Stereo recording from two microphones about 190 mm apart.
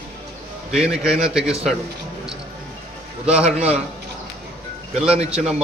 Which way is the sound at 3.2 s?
5° right (ahead or behind).